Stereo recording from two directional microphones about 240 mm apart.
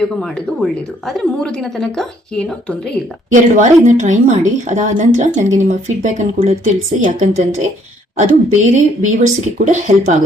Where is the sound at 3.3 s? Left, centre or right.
Right.